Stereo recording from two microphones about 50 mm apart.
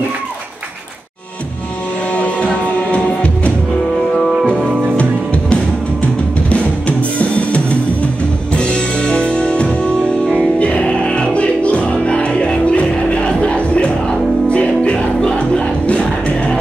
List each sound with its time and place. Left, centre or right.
2.1 s music: left
4.9 s music: left
11.3 s music: left